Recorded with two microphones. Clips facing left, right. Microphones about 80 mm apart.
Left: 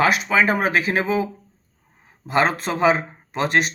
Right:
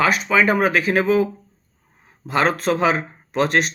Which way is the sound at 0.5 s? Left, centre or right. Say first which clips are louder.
Right 2 dB; left.